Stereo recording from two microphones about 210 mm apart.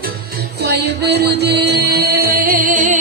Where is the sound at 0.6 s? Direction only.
50° right (ahead or behind).